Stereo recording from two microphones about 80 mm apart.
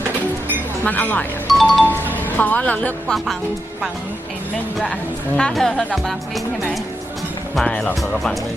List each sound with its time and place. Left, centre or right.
0.9 s speech: left
1.5 s music: centre
2.4 s speech: centre
5.4 s speech: centre
7.6 s speech: centre